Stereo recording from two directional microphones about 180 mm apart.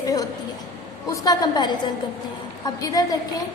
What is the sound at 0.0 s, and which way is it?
A woman's voice, 20° left (ahead or behind).